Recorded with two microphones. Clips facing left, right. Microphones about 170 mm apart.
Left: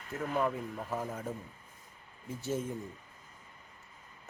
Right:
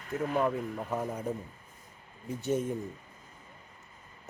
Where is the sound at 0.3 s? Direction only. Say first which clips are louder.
Right 2 dB; 20° right (ahead or behind).